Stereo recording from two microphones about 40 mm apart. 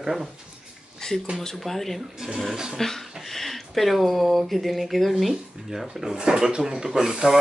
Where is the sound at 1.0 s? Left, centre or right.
Centre.